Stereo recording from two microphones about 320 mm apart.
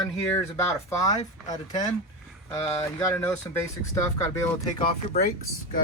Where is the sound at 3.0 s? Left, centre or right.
Centre.